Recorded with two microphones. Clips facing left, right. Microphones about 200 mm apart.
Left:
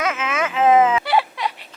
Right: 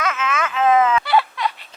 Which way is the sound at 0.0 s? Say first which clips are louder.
Even; 10° left (ahead or behind).